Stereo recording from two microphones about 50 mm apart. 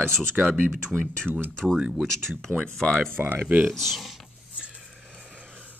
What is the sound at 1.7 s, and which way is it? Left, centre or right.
Speech, right.